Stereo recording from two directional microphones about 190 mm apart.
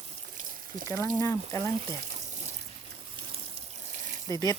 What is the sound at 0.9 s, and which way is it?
Speech, 15° left (ahead or behind).